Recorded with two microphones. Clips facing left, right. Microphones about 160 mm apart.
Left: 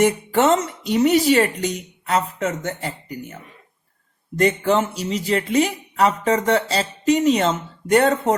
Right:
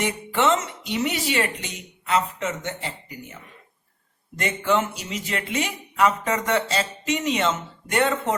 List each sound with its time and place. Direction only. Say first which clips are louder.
0.0 s speech: left 6 dB; 40° left (ahead or behind)
4.4 s speech: left 5 dB; 35° left (ahead or behind)